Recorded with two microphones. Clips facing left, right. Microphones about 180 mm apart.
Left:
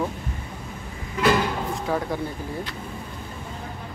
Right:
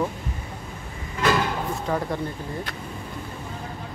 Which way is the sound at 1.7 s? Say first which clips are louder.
Even; centre (ahead or behind).